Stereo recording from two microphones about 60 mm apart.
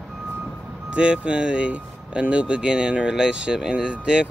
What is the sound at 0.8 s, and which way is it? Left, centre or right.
Speech, centre.